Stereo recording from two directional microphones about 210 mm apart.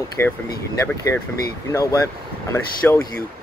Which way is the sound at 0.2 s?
10° left (ahead or behind).